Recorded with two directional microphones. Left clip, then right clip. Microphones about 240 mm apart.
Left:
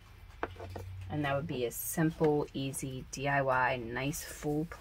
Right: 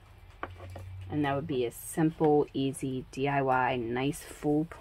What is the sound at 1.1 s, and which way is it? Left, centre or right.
Speech, right.